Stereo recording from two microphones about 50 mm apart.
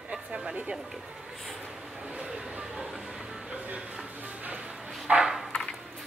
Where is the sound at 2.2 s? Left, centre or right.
Right.